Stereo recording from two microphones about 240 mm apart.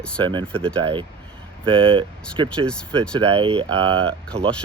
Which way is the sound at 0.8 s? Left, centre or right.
Right.